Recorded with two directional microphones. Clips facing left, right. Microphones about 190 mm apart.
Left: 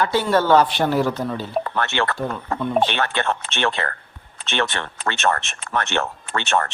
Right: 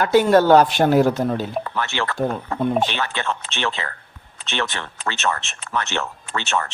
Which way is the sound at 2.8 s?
55° left (ahead or behind).